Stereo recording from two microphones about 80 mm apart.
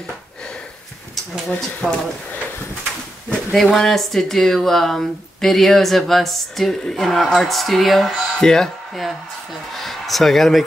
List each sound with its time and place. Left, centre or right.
1.5 s speech: centre
3.5 s speech: centre
9.8 s a sound: centre